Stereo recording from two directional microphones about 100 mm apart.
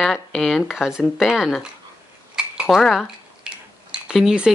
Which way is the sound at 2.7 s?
Centre (ahead or behind).